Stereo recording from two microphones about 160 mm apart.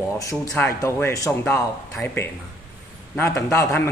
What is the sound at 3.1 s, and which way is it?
Speech, 20° left (ahead or behind).